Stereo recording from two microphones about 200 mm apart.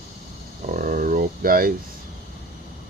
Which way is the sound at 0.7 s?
45° right (ahead or behind).